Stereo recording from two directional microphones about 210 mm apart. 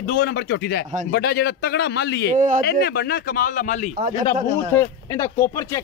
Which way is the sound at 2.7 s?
50° left (ahead or behind).